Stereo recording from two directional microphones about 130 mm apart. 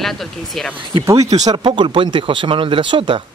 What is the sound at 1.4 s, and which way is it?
Speech, 35° right (ahead or behind).